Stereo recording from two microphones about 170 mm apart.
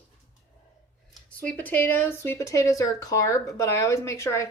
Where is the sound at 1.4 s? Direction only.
10° left (ahead or behind).